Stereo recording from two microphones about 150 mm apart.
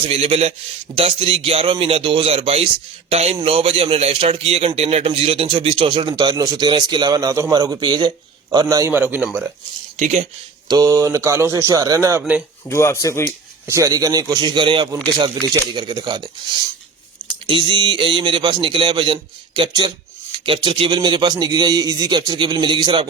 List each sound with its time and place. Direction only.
0.0 s a man's voice: 40° right (ahead or behind); by 8.9 s 25° right (ahead or behind)
8.9 s a man's voice: 10° right (ahead or behind)
10.0 s speech: 50° right (ahead or behind)
10.7 s a man's voice: 25° right (ahead or behind)
12.6 s speech: 20° left (ahead or behind)
13.7 s a man's voice: 20° right (ahead or behind)
17.4 s a man's voice: 35° right (ahead or behind)